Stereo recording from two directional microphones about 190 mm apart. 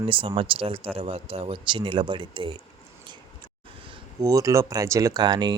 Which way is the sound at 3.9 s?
20° right (ahead or behind).